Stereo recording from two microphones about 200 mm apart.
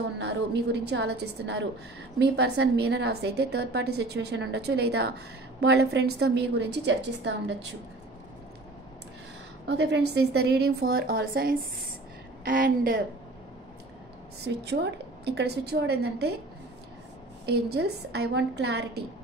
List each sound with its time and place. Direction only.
0.2 s a woman's voice: 60° right (ahead or behind)
9.7 s a woman's voice: 60° right (ahead or behind)
14.4 s a woman's voice: 55° right (ahead or behind)
17.5 s a woman's voice: 55° right (ahead or behind)